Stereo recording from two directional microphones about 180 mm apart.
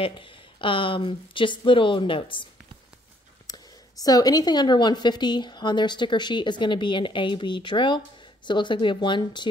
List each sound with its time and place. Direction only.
0.0 s a woman's voice: 30° left (ahead or behind)
3.4 s a woman's voice: 20° left (ahead or behind)